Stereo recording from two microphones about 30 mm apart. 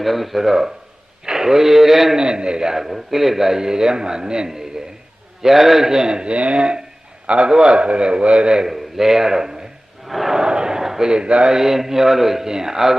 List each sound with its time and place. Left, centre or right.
0.0 s speech: centre
1.2 s a sound: centre
2.1 s a man's voice: right
2.7 s a man's voice: centre
5.4 s a man's voice: centre
5.9 s a man's voice: right
6.2 s a man's voice: right
8.6 s a man's voice: centre
10.1 s speech: centre
10.3 s a sound: right
11.1 s a man's voice: right
11.5 s a man's voice: centre
12.5 s a man's voice: centre